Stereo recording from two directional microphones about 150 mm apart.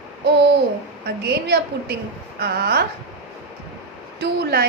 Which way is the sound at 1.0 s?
90° right.